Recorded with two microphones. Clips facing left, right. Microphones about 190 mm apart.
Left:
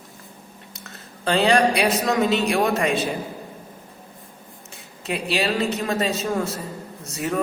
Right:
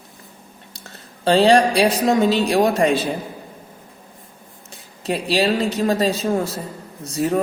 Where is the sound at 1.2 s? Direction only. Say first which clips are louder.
Right 4 dB; 30° right (ahead or behind).